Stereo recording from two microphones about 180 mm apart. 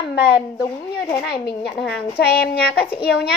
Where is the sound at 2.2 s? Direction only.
60° left (ahead or behind).